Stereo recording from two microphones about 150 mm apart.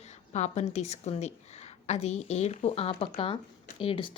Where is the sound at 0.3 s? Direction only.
50° left (ahead or behind).